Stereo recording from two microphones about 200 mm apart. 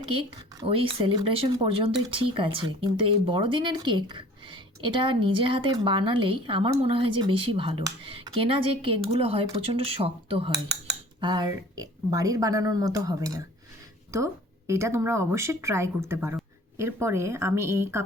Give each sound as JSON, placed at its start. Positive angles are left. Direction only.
{"t": 0.0, "sound": "speech", "side_deg": -25}
{"t": 14.7, "sound": "speech", "side_deg": -15}